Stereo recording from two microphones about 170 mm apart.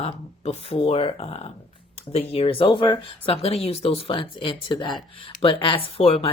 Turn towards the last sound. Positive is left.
turn(degrees=35)  # may be behind; listen again after turning